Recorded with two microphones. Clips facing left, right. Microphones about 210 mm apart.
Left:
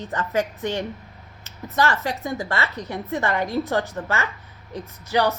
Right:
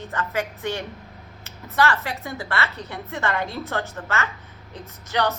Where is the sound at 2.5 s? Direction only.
20° left (ahead or behind).